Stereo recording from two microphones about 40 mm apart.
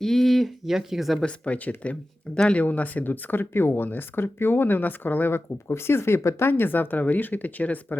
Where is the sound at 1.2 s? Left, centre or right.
Left.